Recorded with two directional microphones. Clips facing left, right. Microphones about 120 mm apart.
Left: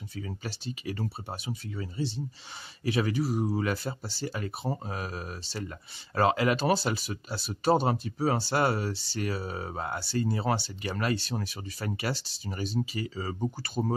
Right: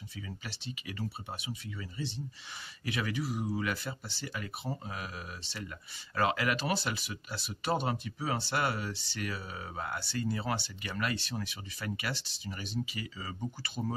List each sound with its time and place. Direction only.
0.1 s speech: 40° left (ahead or behind)